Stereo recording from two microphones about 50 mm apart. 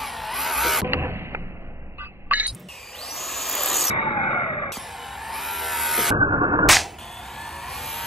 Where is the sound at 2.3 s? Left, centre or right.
Right.